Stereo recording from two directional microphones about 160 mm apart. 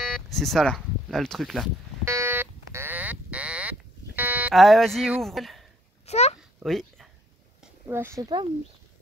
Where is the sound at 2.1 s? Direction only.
15° right (ahead or behind).